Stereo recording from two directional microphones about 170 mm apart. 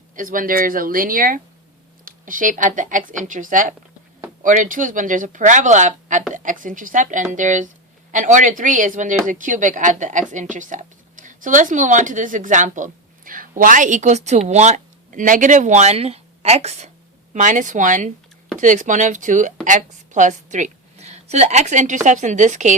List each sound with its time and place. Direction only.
0.2 s a woman's voice: 55° right (ahead or behind)